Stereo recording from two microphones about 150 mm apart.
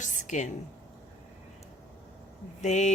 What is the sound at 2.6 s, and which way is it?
Speech, 50° left (ahead or behind).